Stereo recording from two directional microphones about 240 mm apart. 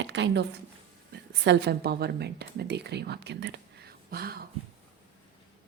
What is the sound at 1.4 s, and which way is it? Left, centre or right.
A woman's voice, right.